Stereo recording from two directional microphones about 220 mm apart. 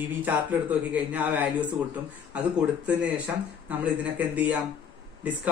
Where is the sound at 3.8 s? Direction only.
5° right (ahead or behind).